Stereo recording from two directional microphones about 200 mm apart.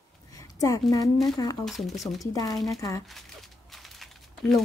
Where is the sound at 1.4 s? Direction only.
20° left (ahead or behind).